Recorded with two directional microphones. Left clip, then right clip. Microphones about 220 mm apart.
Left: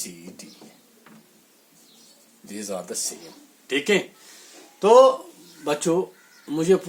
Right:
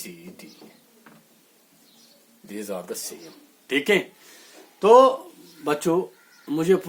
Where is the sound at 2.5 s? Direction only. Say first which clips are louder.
Even; 35° right (ahead or behind).